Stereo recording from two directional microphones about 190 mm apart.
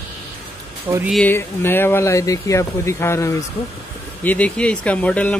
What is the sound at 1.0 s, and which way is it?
Speech, 5° left (ahead or behind).